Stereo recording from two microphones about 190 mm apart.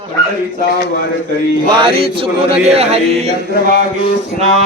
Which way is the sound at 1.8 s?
30° right (ahead or behind).